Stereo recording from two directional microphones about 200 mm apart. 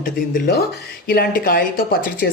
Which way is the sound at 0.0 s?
50° left (ahead or behind).